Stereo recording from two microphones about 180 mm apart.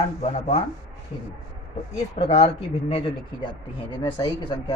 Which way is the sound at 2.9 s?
35° left (ahead or behind).